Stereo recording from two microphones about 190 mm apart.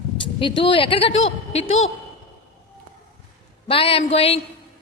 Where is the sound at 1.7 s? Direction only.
90° left.